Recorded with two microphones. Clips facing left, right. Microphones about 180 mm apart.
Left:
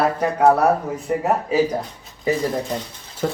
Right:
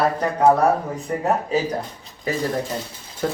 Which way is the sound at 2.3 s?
20° left (ahead or behind).